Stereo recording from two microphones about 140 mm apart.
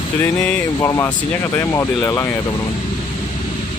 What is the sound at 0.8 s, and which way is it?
Mantra, 25° left (ahead or behind).